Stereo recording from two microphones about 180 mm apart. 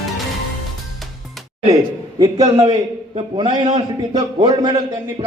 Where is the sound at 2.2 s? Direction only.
20° right (ahead or behind).